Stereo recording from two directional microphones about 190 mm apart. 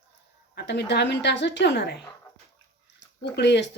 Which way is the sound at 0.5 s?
60° left (ahead or behind).